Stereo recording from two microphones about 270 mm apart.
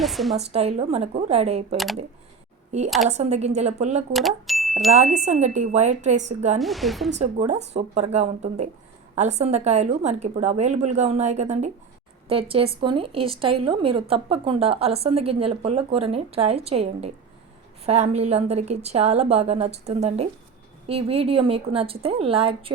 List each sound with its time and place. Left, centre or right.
0.0 s a woman's voice: centre
0.3 s a woman's voice: right
1.7 s a woman's voice: centre
3.1 s a woman's voice: right
4.1 s a sound: centre
5.1 s a woman's voice: right
6.6 s a woman's voice: centre
7.1 s a woman's voice: right